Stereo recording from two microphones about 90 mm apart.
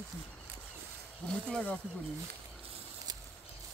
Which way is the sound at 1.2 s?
10° left (ahead or behind).